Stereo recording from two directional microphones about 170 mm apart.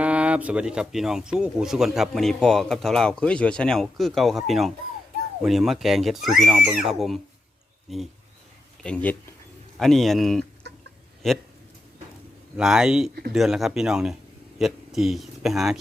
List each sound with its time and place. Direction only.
0.0 s speech: 5° right (ahead or behind)
10.6 s chicken: 80° right
11.2 s speech: centre (ahead or behind)
12.5 s speech: 5° right (ahead or behind)